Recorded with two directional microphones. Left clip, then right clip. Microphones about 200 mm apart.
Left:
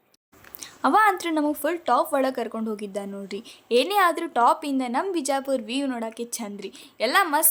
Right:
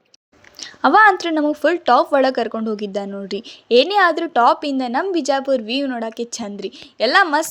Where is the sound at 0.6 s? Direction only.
20° right (ahead or behind).